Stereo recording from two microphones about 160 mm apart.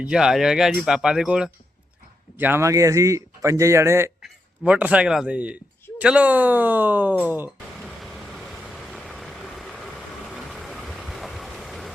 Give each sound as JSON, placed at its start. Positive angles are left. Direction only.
{"t": 0.0, "sound": "speech", "side_deg": -5}
{"t": 2.4, "sound": "speech", "side_deg": -15}
{"t": 7.8, "sound": "vehicle", "side_deg": 0}